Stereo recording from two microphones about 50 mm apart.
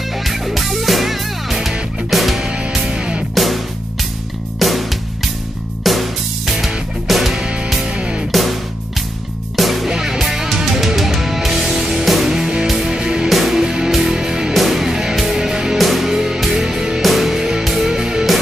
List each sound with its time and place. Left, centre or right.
0.2 s music: centre
2.4 s music: centre
3.3 s music: centre
7.4 s music: centre
8.3 s music: centre
9.6 s music: centre
13.3 s music: centre
14.5 s music: centre
15.8 s music: centre
16.1 s music: centre